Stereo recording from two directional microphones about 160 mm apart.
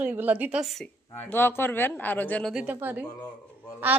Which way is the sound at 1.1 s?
15° left (ahead or behind).